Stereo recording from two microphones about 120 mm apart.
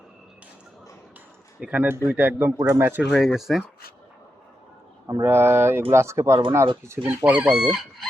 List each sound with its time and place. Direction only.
1.7 s speech: 15° right (ahead or behind)
3.1 s chicken: centre (ahead or behind)
5.2 s speech: 20° right (ahead or behind)
7.3 s chicken: 10° right (ahead or behind)